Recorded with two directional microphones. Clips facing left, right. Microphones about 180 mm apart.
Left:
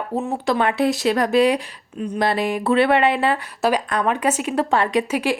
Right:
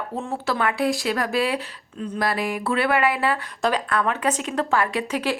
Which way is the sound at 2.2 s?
25° left (ahead or behind).